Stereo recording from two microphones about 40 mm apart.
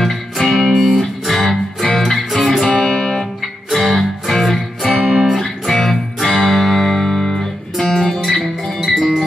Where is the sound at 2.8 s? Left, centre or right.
Centre.